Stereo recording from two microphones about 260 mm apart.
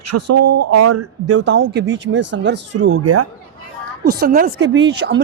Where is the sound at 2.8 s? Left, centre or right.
Right.